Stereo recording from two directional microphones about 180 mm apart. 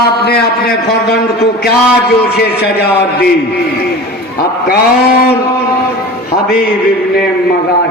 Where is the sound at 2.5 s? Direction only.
65° left (ahead or behind).